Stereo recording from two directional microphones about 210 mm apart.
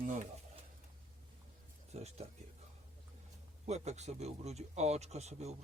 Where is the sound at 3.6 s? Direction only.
30° right (ahead or behind).